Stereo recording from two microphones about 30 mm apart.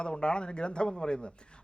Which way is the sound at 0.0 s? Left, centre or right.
Left.